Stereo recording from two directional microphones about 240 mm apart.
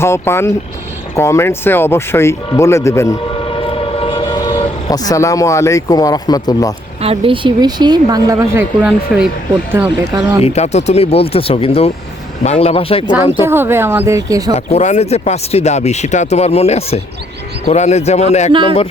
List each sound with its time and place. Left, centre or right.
0.0 s speech: centre
3.4 s vehicle: left
7.0 s speech: right
10.4 s speech: left
13.4 s speech: centre
14.5 s speech: left